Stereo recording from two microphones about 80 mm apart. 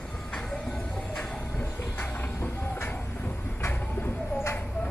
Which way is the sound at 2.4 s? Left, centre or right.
Left.